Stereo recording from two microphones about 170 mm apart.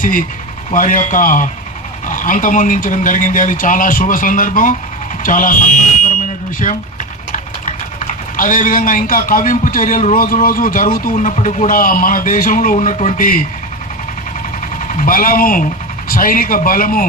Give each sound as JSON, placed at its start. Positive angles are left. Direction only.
{"t": 0.0, "sound": "speech", "side_deg": 55}
{"t": 13.1, "sound": "speech", "side_deg": 55}
{"t": 14.8, "sound": "speech", "side_deg": 50}